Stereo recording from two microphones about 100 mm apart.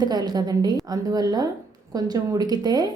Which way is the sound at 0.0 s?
40° right (ahead or behind).